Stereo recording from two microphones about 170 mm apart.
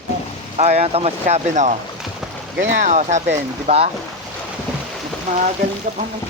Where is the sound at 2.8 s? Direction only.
45° right (ahead or behind).